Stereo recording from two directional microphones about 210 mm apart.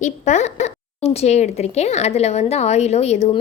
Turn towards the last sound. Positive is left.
turn(degrees=30)  # may be behind; listen again after turning